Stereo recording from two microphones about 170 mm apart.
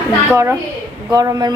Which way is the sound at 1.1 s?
20° right (ahead or behind).